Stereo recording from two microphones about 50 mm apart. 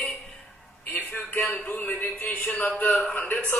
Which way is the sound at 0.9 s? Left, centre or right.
Left.